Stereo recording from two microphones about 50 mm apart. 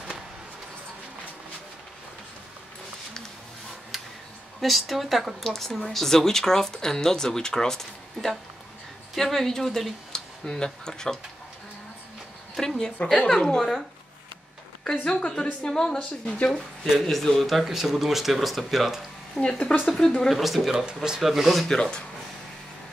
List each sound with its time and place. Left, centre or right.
4.6 s speech: centre
12.5 s speech: centre
13.0 s a woman's voice: left
14.9 s a woman's voice: centre
19.4 s speech: left
19.9 s a man's voice: centre